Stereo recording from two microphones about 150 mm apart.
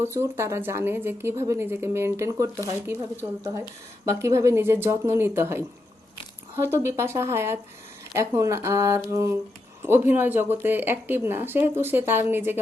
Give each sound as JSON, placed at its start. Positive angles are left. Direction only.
{"t": 0.0, "sound": "speech", "side_deg": -15}